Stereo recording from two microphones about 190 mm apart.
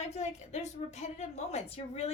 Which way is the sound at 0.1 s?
35° left (ahead or behind).